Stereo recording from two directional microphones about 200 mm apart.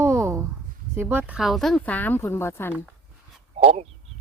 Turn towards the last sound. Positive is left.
turn(degrees=-30)  # may be behind; listen again after turning